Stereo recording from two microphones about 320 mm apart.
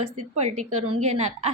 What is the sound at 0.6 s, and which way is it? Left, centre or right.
Speech, right.